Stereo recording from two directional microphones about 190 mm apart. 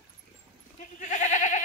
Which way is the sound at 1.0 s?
40° left (ahead or behind).